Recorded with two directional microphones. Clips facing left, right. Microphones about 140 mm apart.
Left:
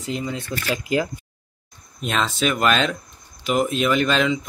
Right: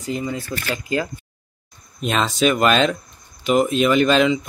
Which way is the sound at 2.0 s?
Centre (ahead or behind).